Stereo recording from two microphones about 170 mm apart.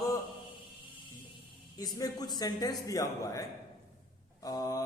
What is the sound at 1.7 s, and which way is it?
A man's voice, 20° left (ahead or behind).